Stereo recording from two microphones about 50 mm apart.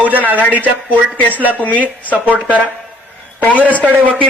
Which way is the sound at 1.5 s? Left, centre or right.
Left.